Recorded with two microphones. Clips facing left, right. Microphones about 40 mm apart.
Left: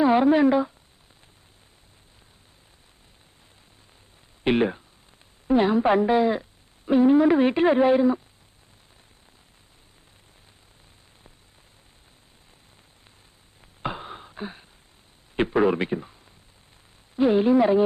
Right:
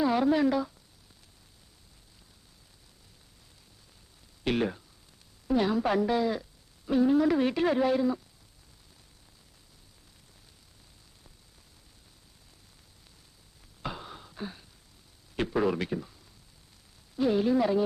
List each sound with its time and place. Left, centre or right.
0.0 s speech: left
4.4 s speech: left
13.8 s a sound: left
15.4 s speech: left
17.2 s speech: left